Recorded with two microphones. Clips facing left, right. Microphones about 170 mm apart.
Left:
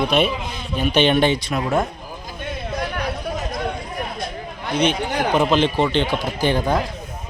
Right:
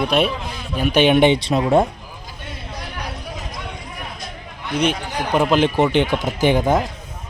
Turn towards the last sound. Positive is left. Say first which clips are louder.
# right 3 dB
turn(degrees=-20)  # may be behind; listen again after turning